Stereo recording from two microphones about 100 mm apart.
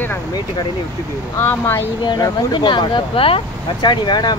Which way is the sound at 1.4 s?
25° left (ahead or behind).